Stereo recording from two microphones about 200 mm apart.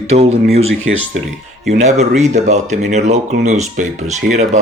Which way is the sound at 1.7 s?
35° right (ahead or behind).